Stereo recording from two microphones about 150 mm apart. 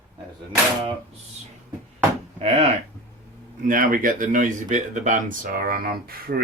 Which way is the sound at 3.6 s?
65° right (ahead or behind).